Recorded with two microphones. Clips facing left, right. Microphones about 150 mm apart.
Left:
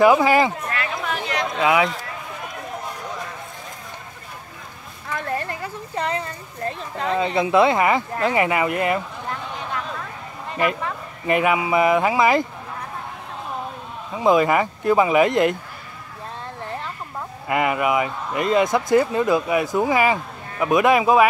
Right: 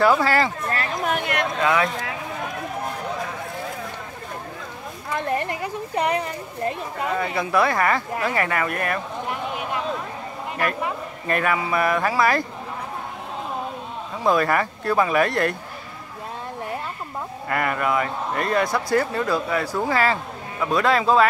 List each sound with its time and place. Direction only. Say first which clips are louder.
0.0 s speech: left 4 dB; 15° left (ahead or behind)
0.7 s a sound: right 2 dB; 40° right (ahead or behind); by 1.5 s 55° right (ahead or behind)
1.6 s speech: left 3 dB; 15° left (ahead or behind)
5.1 s a sound: right 2 dB; 20° right (ahead or behind)
7.2 s speech: left 5 dB; 20° left (ahead or behind)
9.3 s a sound: right 1 dB; 15° right (ahead or behind)
11.2 s speech: left 4 dB; 15° left (ahead or behind)
14.1 s speech: left 3 dB; 15° left (ahead or behind)
17.5 s speech: left 3 dB; 15° left (ahead or behind)